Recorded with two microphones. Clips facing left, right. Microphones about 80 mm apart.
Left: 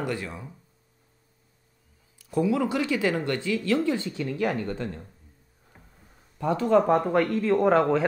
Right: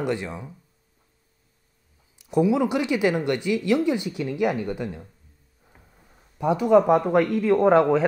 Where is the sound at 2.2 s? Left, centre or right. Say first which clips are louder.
Right 4 dB; centre.